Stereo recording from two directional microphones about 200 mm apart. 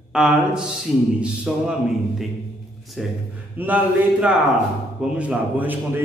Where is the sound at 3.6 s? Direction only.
10° right (ahead or behind).